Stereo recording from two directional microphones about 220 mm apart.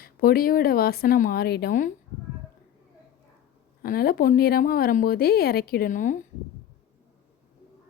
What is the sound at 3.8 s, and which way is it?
A woman's voice, 40° left (ahead or behind).